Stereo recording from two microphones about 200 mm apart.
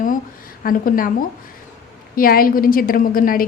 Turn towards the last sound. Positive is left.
turn(degrees=45)  # may be behind; listen again after turning